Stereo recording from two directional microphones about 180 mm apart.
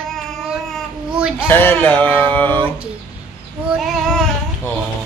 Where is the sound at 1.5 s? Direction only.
10° left (ahead or behind).